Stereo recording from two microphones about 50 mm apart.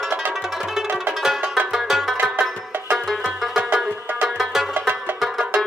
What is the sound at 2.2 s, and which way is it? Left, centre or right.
Music, right.